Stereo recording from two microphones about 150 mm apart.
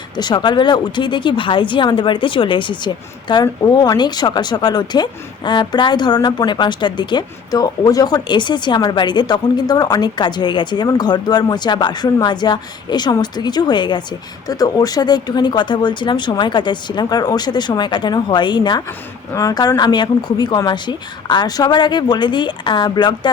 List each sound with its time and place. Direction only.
0.2 s speech: 30° left (ahead or behind)